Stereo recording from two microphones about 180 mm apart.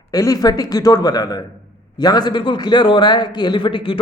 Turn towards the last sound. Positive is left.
turn(degrees=25)  # may be behind; listen again after turning